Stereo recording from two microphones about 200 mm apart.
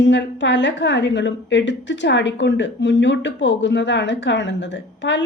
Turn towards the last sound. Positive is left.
turn(degrees=65)  # may be behind; listen again after turning